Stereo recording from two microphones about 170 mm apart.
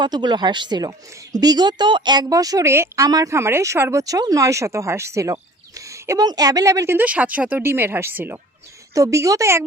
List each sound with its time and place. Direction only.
0.0 s a woman's voice: 25° right (ahead or behind)